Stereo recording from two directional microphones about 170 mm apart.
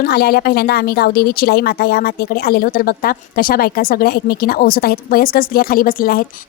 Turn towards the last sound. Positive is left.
turn(degrees=60)  # may be behind; listen again after turning